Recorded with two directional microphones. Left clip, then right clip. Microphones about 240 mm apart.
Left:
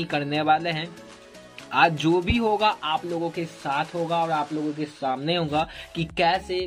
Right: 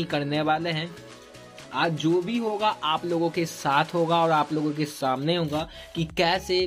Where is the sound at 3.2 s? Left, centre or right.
Centre.